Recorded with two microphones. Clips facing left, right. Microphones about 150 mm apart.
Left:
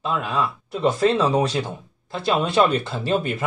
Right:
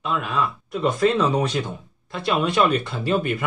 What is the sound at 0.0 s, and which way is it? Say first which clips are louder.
Speech: left 1 dB; 35° left (ahead or behind).